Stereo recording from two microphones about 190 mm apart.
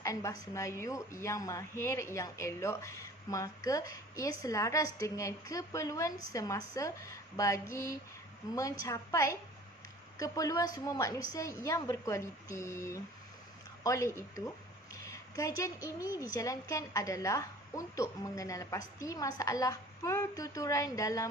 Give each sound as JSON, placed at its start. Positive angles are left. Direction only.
{"t": 0.0, "sound": "a woman's voice", "side_deg": 15}
{"t": 15.0, "sound": "a sound", "side_deg": 15}
{"t": 16.0, "sound": "a woman's voice", "side_deg": 15}